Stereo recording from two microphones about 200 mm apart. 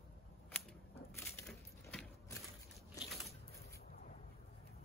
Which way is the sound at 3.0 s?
Centre (ahead or behind).